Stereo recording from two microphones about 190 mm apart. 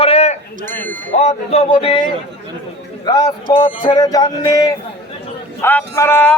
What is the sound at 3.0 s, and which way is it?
Speech, 20° left (ahead or behind).